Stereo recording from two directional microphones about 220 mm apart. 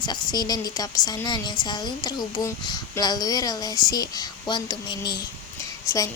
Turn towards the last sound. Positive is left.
turn(degrees=15)  # may be behind; listen again after turning